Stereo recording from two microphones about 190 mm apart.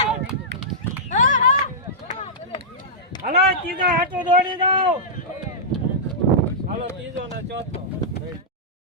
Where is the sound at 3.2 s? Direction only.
50° right (ahead or behind).